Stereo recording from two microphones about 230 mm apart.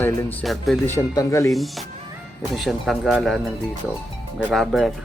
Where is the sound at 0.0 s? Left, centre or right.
Centre.